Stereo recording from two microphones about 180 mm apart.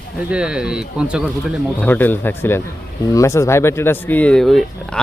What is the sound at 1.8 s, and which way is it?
Speech, 10° left (ahead or behind).